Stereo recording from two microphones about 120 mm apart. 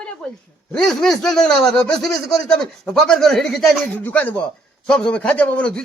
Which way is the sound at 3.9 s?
15° left (ahead or behind).